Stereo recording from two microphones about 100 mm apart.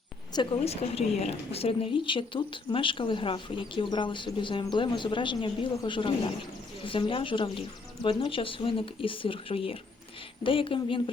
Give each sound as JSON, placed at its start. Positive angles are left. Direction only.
{"t": 0.6, "sound": "speech", "side_deg": 90}